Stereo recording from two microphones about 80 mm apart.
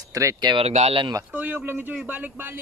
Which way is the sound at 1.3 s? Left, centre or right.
Right.